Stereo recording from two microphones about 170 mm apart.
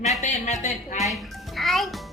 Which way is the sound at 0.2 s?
45° left (ahead or behind).